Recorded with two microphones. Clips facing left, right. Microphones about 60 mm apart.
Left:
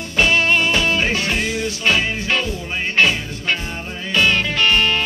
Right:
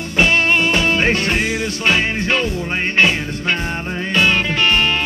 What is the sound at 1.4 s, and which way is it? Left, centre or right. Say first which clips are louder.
Music: right 2 dB; right.